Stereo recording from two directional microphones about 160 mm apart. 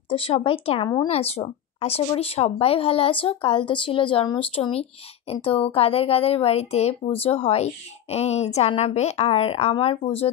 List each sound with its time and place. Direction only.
0.1 s a woman's voice: 35° left (ahead or behind)